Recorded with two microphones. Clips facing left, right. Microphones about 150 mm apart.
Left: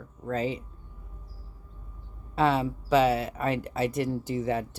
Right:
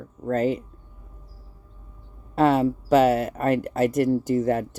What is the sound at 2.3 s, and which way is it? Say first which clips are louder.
Speech: right 6 dB; 45° right (ahead or behind).